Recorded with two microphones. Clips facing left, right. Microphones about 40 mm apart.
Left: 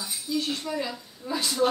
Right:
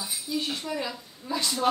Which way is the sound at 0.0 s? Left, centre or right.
Centre.